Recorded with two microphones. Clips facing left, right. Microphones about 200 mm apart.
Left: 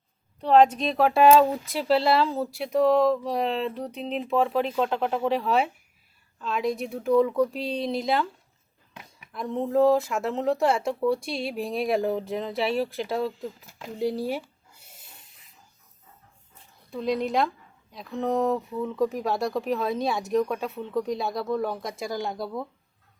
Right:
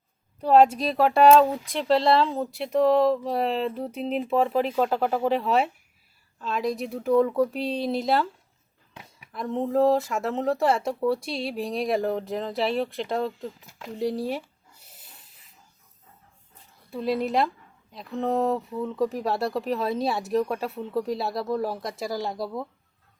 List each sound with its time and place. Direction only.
0.3 s speech: 5° right (ahead or behind)
9.3 s speech: centre (ahead or behind)
16.9 s speech: 5° right (ahead or behind)